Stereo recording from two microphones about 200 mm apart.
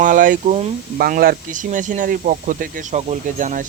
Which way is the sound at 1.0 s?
50° right (ahead or behind).